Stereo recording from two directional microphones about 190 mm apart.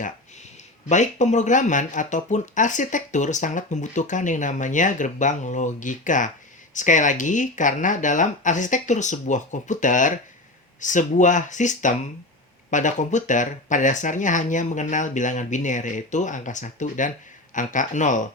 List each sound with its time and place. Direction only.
0.9 s speech: 40° left (ahead or behind)